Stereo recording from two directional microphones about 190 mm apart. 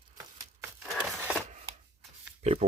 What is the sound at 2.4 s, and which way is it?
Pig, 35° right (ahead or behind).